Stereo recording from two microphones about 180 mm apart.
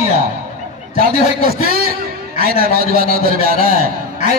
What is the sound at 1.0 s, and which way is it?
A man's voice, 55° right (ahead or behind).